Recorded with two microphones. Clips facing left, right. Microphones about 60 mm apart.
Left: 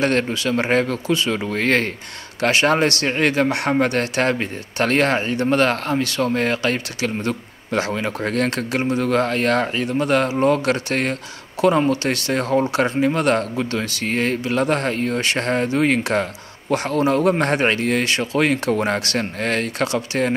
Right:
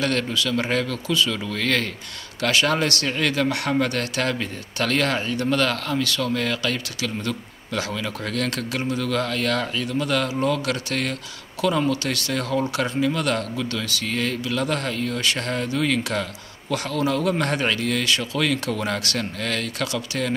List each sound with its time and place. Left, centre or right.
0.0 s speech: left